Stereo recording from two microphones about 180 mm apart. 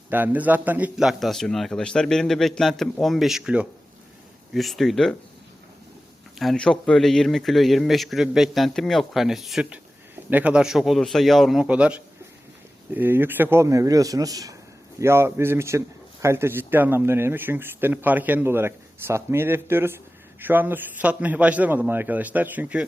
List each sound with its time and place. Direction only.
0.1 s a man's voice: 10° right (ahead or behind)
6.4 s a man's voice: 5° left (ahead or behind)